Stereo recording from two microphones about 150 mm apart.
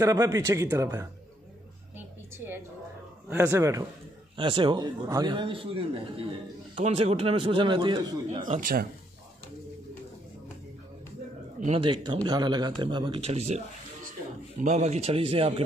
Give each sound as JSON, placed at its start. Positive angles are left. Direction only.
{"t": 0.0, "sound": "speech", "side_deg": -20}
{"t": 2.0, "sound": "a sound", "side_deg": -15}
{"t": 3.3, "sound": "speech", "side_deg": -15}
{"t": 4.4, "sound": "speech", "side_deg": -35}
{"t": 8.5, "sound": "speech", "side_deg": -65}
{"t": 11.7, "sound": "speech", "side_deg": -35}
{"t": 14.6, "sound": "speech", "side_deg": -50}